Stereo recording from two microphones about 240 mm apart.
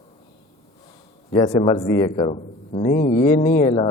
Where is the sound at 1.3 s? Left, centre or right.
Left.